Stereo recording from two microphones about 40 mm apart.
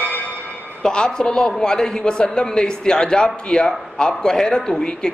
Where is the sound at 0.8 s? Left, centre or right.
Centre.